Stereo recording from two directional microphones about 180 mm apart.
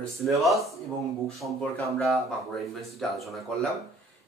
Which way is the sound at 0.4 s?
Centre (ahead or behind).